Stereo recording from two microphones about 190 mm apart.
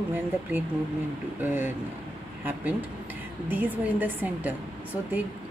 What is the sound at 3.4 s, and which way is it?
Speech, 10° right (ahead or behind).